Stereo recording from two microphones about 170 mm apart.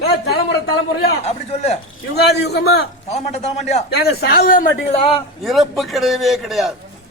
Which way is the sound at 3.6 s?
40° left (ahead or behind).